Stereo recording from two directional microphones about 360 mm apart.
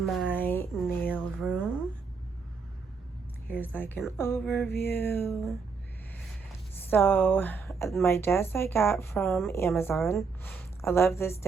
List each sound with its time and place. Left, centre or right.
0.0 s a sound: centre
3.5 s speech: centre
6.9 s speech: centre